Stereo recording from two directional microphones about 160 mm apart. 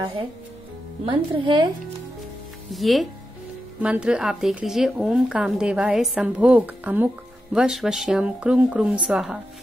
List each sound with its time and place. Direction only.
1.0 s a woman's voice: 30° right (ahead or behind)
2.7 s speech: centre (ahead or behind)